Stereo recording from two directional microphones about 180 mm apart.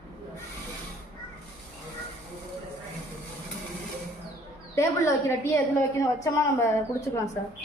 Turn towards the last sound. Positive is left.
turn(degrees=15)  # may be behind; listen again after turning